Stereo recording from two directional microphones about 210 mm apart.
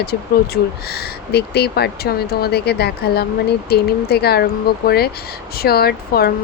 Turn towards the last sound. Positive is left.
turn(degrees=50)  # may be behind; listen again after turning